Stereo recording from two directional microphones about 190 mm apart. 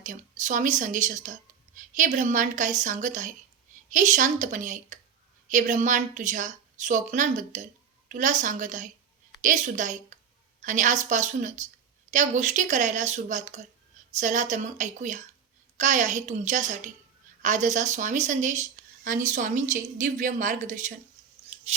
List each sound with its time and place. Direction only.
0.0 s speech: 40° right (ahead or behind)
21.5 s chewing: 35° right (ahead or behind)